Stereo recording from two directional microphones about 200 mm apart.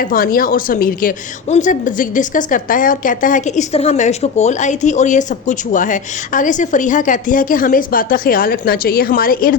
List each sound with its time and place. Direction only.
0.0 s a woman's voice: 45° left (ahead or behind)